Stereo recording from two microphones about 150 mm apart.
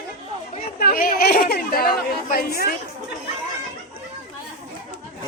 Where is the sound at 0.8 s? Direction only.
75° left (ahead or behind).